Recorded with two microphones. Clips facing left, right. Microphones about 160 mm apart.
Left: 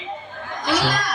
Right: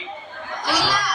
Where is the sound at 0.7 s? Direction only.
50° left (ahead or behind).